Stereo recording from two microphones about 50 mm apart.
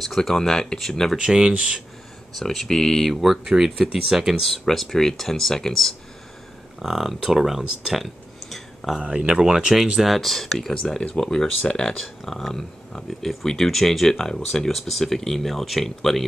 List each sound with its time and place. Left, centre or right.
0.0 s speech: centre
1.1 s speech: centre
2.3 s speech: centre
4.5 s speech: centre
6.8 s speech: centre
9.0 s speech: right
9.9 s speech: centre